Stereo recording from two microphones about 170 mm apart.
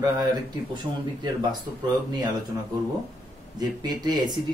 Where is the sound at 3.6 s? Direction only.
25° right (ahead or behind).